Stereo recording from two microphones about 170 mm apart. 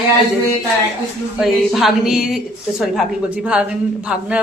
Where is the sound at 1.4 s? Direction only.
Centre (ahead or behind).